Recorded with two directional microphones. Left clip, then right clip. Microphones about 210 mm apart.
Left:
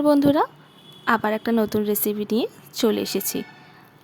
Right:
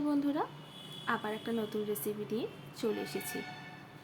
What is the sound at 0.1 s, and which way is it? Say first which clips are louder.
A woman's voice: left 15 dB; 55° left (ahead or behind).